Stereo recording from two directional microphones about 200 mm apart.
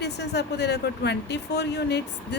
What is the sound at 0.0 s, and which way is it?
Speech, 55° left (ahead or behind).